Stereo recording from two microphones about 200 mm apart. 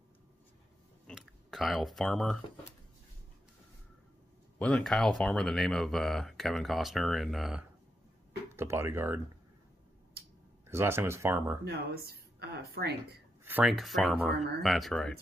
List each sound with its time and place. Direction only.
1.0 s a sound: centre (ahead or behind)
4.6 s speech: 5° left (ahead or behind)
8.5 s speech: 15° right (ahead or behind)
10.7 s speech: 15° right (ahead or behind)
11.6 s speech: 55° right (ahead or behind)
13.4 s speech: 10° right (ahead or behind)